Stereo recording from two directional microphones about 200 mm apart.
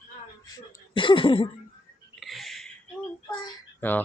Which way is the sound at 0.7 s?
25° left (ahead or behind).